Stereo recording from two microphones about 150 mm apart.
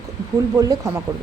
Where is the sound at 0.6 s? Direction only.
20° right (ahead or behind).